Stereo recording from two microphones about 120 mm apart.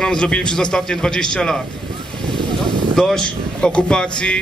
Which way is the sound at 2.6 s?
5° left (ahead or behind).